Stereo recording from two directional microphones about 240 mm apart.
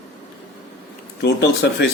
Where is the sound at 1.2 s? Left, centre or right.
Left.